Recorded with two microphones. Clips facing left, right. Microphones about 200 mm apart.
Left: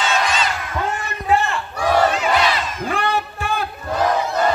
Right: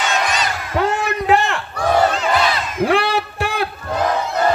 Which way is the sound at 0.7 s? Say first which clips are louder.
Right 10 dB; 85° right.